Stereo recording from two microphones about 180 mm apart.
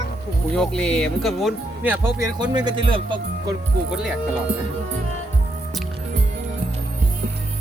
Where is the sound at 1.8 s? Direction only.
10° right (ahead or behind).